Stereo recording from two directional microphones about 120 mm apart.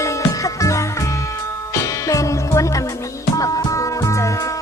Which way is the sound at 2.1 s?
25° left (ahead or behind).